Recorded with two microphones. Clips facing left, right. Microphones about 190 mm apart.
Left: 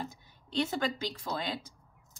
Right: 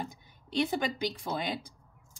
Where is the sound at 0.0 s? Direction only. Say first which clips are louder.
Right 1 dB; 15° right (ahead or behind).